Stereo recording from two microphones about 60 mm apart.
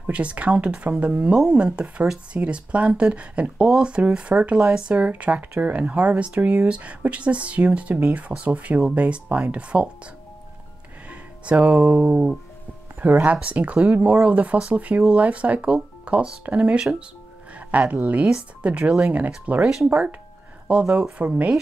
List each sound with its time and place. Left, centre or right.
0.0 s speech: right
11.1 s speech: right
13.0 s speech: right